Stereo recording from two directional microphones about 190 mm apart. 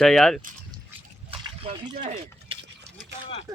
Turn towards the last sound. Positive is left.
turn(degrees=-15)  # may be behind; listen again after turning